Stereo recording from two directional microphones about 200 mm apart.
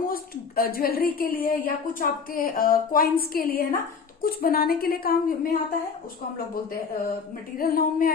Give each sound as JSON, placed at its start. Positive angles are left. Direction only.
{"t": 0.1, "sound": "a woman's voice", "side_deg": 45}
{"t": 7.6, "sound": "a woman's voice", "side_deg": 45}